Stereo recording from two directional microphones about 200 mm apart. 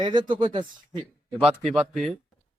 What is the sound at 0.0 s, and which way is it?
Speech, 25° right (ahead or behind).